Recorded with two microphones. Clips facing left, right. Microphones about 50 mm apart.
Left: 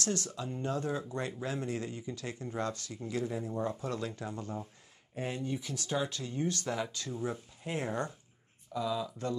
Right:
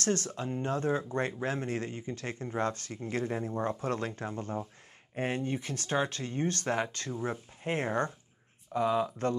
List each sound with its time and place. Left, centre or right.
0.0 s speech: right